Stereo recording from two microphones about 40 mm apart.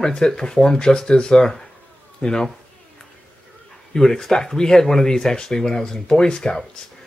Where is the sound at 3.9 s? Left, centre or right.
Centre.